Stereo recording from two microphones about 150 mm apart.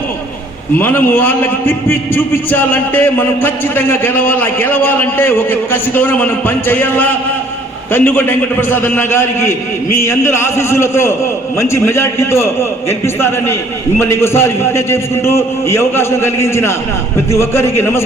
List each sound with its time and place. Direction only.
0.8 s a man's voice: 15° left (ahead or behind)
10.1 s a man's voice: 20° left (ahead or behind)